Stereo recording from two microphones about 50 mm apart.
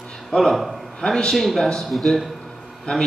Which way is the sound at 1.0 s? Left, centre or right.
Centre.